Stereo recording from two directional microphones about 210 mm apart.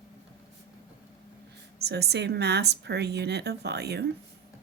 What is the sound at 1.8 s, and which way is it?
Speech, 50° right (ahead or behind).